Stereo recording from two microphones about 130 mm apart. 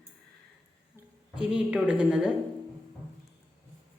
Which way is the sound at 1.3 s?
10° right (ahead or behind).